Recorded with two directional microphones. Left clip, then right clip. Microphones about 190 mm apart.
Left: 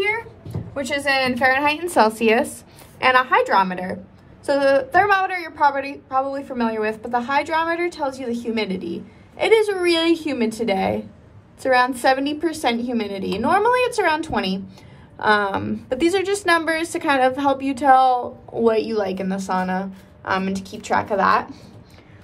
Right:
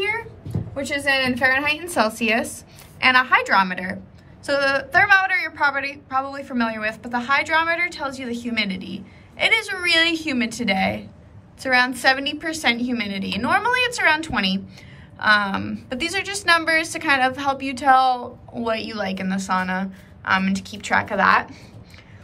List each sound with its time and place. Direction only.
0.7 s a woman's voice: 45° left (ahead or behind); by 21.5 s 25° left (ahead or behind)